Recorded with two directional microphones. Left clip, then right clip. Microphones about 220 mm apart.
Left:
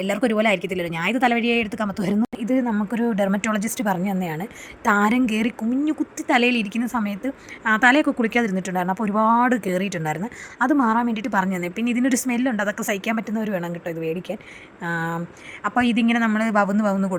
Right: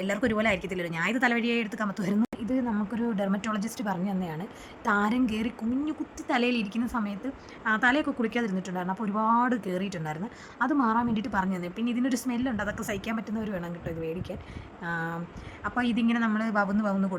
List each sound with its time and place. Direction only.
0.0 s a woman's voice: 20° left (ahead or behind)